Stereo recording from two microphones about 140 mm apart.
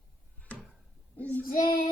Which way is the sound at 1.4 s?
90° left.